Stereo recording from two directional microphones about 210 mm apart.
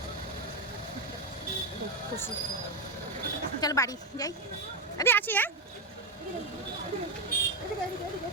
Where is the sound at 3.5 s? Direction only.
15° left (ahead or behind).